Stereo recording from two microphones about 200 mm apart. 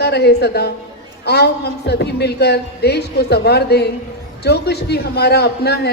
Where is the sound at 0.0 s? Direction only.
55° left (ahead or behind).